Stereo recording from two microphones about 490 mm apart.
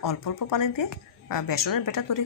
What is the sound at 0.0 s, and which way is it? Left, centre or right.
A woman's voice, left.